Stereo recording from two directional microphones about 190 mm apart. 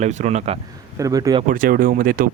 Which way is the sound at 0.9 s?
15° right (ahead or behind).